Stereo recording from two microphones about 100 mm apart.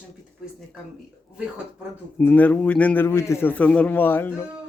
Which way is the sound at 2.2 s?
15° left (ahead or behind).